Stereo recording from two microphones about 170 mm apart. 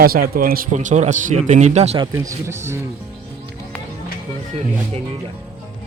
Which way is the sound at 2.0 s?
20° right (ahead or behind).